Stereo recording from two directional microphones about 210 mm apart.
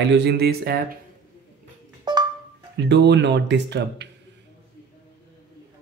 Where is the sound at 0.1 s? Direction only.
50° right (ahead or behind).